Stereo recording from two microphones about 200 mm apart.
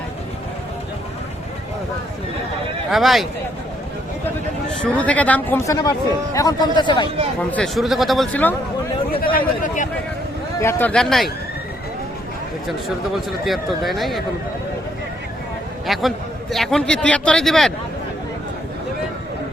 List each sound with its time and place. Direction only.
2.9 s a man's voice: centre (ahead or behind)
4.7 s speech: 5° left (ahead or behind); by 7.1 s 25° left (ahead or behind)
7.5 s a man's voice: centre (ahead or behind)
9.2 s a man's voice: 45° left (ahead or behind)
10.6 s a man's voice: 10° left (ahead or behind)
13.4 s a man's voice: centre (ahead or behind)
15.9 s a man's voice: centre (ahead or behind)